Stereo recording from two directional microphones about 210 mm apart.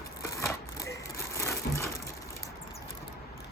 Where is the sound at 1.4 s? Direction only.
15° left (ahead or behind).